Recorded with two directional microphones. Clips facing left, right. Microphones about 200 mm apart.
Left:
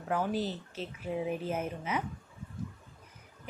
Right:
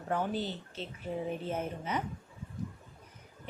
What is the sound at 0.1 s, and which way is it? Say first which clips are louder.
Speech: left 1 dB; 5° left (ahead or behind).